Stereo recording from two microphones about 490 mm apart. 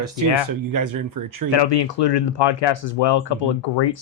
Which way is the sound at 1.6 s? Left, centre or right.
Left.